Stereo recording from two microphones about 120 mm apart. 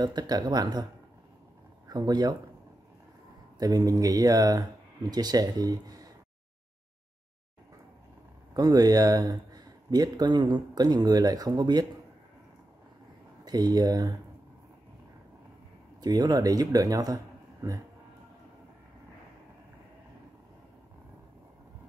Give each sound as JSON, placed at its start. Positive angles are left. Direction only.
{"t": 0.0, "sound": "speech", "side_deg": -35}
{"t": 1.9, "sound": "speech", "side_deg": -35}
{"t": 3.5, "sound": "speech", "side_deg": -30}
{"t": 8.5, "sound": "speech", "side_deg": -30}
{"t": 13.5, "sound": "speech", "side_deg": -35}
{"t": 16.0, "sound": "speech", "side_deg": -35}